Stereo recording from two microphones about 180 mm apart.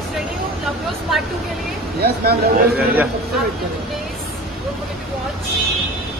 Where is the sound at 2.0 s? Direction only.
60° right (ahead or behind).